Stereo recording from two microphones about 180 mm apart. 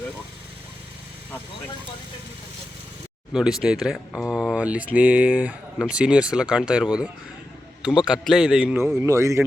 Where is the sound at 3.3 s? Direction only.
5° right (ahead or behind).